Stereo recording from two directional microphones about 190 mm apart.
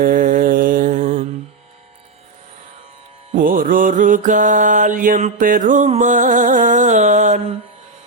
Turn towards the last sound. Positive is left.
turn(degrees=-40)  # may be behind; listen again after turning